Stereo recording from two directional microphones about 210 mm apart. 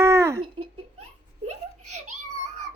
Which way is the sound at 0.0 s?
10° right (ahead or behind).